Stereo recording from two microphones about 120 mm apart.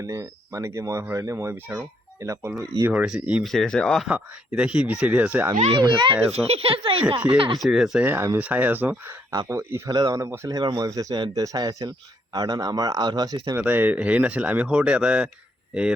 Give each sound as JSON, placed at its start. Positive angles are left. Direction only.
{"t": 0.0, "sound": "speech", "side_deg": -25}
{"t": 2.8, "sound": "speech", "side_deg": -10}
{"t": 3.4, "sound": "speech", "side_deg": 5}
{"t": 4.1, "sound": "speech", "side_deg": -10}
{"t": 5.7, "sound": "speech", "side_deg": -40}
{"t": 6.3, "sound": "a child's voice", "side_deg": -55}
{"t": 7.6, "sound": "speech", "side_deg": -5}
{"t": 8.0, "sound": "speech", "side_deg": -20}
{"t": 9.3, "sound": "speech", "side_deg": -25}
{"t": 9.9, "sound": "speech", "side_deg": -35}
{"t": 13.6, "sound": "speech", "side_deg": -15}